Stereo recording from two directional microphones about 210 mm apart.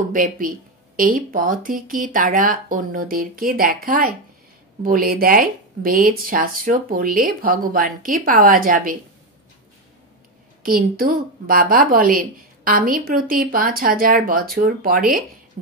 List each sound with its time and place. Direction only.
0.1 s speech: 40° right (ahead or behind)
10.6 s speech: 45° right (ahead or behind)
15.6 s a sound: 45° right (ahead or behind)